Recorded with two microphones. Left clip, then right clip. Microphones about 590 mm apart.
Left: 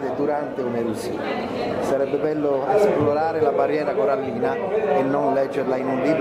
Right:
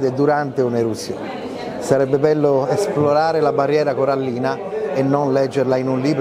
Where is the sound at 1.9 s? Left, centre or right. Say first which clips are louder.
Right 9 dB; right.